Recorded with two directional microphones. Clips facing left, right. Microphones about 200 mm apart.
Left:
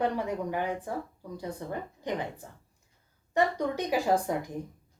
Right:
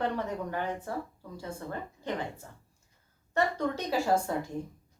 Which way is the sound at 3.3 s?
15° left (ahead or behind).